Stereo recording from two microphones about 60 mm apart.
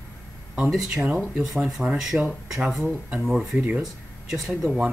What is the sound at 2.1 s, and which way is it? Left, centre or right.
Speech, right.